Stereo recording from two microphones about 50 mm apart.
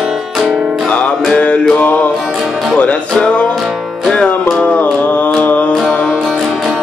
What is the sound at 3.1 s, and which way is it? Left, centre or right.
Music, centre.